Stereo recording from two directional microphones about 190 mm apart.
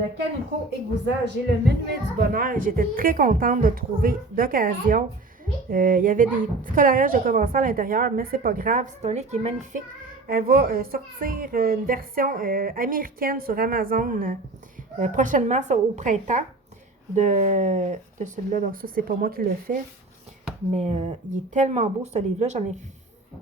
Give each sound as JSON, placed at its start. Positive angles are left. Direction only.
{"t": 1.0, "sound": "a woman's voice", "side_deg": -60}
{"t": 10.2, "sound": "a woman's voice", "side_deg": -50}
{"t": 20.7, "sound": "speech", "side_deg": -35}